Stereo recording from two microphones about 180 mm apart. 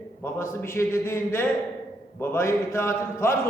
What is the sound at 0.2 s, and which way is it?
A man's voice, 15° left (ahead or behind).